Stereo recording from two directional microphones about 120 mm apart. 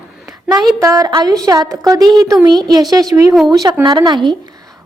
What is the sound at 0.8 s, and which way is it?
A woman's voice, 30° right (ahead or behind).